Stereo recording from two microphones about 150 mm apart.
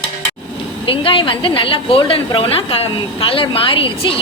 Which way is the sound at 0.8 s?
35° left (ahead or behind).